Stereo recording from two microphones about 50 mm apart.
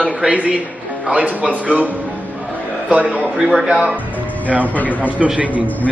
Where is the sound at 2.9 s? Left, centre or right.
Right.